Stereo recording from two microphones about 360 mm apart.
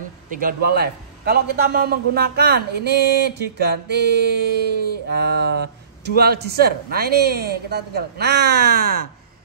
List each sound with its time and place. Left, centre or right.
0.4 s a man's voice: right